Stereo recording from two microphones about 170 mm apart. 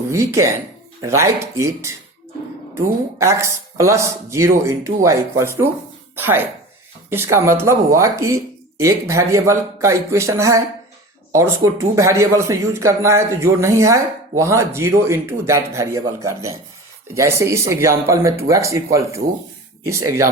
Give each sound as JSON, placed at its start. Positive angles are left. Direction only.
{"t": 0.1, "sound": "speech", "side_deg": -15}